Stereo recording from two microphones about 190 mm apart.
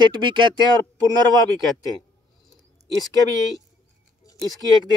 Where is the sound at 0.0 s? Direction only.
25° right (ahead or behind).